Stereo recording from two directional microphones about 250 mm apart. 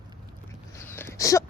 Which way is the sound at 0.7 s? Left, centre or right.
Centre.